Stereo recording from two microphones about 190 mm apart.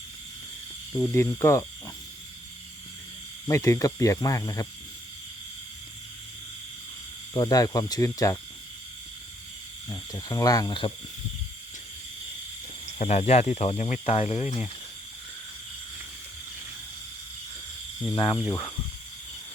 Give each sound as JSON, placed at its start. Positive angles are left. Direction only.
{"t": 0.9, "sound": "speech", "side_deg": 15}
{"t": 3.4, "sound": "speech", "side_deg": 15}
{"t": 7.3, "sound": "speech", "side_deg": 20}
{"t": 9.9, "sound": "speech", "side_deg": 20}
{"t": 13.0, "sound": "speech", "side_deg": 35}
{"t": 18.1, "sound": "speech", "side_deg": 25}